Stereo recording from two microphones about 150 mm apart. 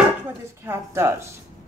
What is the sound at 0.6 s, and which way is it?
Speech, 15° right (ahead or behind).